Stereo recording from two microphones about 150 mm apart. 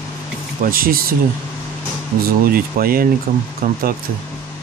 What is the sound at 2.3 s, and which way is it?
Speech, 80° right.